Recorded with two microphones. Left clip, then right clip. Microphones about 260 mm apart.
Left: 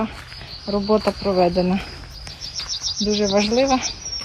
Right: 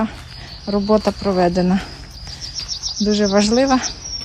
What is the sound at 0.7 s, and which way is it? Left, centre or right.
Speech, right.